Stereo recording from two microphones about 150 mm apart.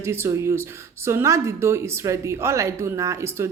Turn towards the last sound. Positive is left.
turn(degrees=-20)  # may be behind; listen again after turning